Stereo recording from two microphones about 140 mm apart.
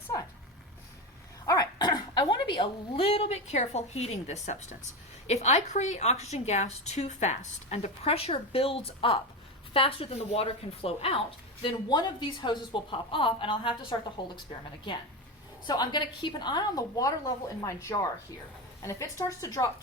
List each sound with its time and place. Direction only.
1.5 s a woman's voice: 30° left (ahead or behind); by 11.2 s 45° left (ahead or behind)
11.9 s a woman's voice: 30° left (ahead or behind)
15.6 s a woman's voice: 30° left (ahead or behind)